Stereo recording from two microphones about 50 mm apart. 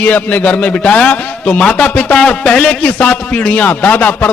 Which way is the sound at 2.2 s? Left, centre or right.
Centre.